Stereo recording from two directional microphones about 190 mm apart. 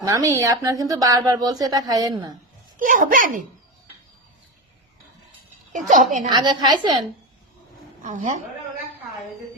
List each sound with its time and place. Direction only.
0.0 s speech: 15° right (ahead or behind)
2.7 s a woman's voice: 45° right (ahead or behind)
5.7 s a woman's voice: 45° right (ahead or behind)
6.3 s speech: 20° right (ahead or behind)
8.0 s a woman's voice: 40° right (ahead or behind)